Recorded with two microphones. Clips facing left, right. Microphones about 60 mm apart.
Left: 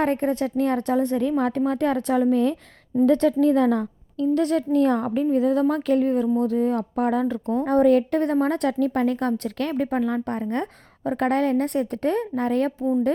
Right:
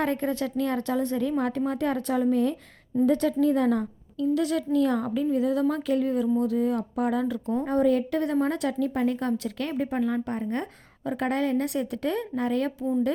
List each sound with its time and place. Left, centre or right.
0.0 s a woman's voice: left